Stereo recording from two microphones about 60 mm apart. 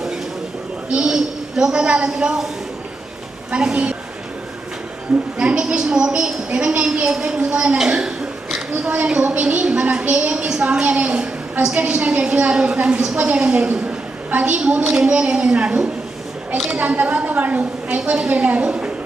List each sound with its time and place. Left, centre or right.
0.9 s a woman's voice: centre
3.5 s a woman's voice: centre
5.4 s a woman's voice: centre
9.2 s a woman's voice: right
12.5 s a woman's voice: centre